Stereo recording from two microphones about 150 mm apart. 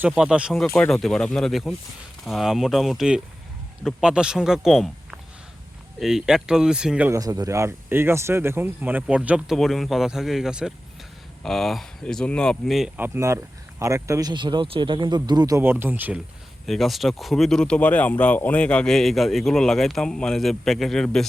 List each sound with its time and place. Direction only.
0.0 s a man's voice: 5° right (ahead or behind)
7.1 s a man's voice: 25° right (ahead or behind); by 12.9 s centre (ahead or behind)
13.0 s speech: 20° right (ahead or behind)
16.6 s a man's voice: centre (ahead or behind)